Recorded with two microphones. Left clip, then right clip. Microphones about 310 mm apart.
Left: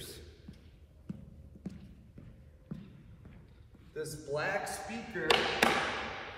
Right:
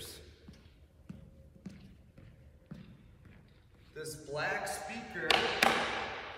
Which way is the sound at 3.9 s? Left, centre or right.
Centre.